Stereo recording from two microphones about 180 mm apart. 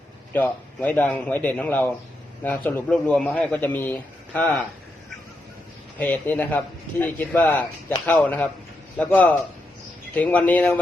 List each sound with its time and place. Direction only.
0.3 s a man's voice: 10° left (ahead or behind)
6.0 s a man's voice: 10° left (ahead or behind)